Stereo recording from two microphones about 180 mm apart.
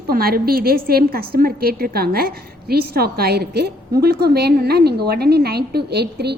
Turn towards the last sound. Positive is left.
turn(degrees=-65)  # may be behind; listen again after turning